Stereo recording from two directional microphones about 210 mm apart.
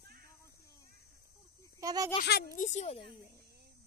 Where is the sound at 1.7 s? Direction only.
15° right (ahead or behind).